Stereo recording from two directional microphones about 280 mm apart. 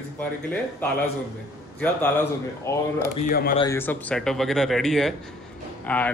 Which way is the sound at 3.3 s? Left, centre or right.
Left.